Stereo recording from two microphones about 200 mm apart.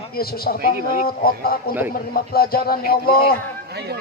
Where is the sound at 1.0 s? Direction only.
50° left (ahead or behind).